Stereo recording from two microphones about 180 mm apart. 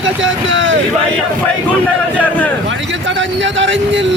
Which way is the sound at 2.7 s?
90° right.